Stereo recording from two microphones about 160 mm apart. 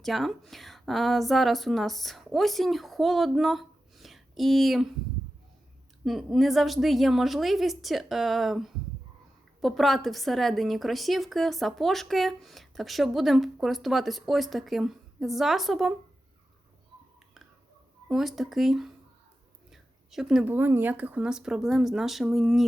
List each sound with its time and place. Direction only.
0.0 s a woman's voice: centre (ahead or behind)
6.1 s a woman's voice: centre (ahead or behind)
18.1 s a woman's voice: centre (ahead or behind)